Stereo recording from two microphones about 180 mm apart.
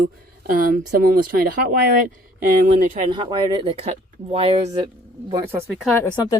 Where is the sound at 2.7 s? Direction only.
45° right (ahead or behind).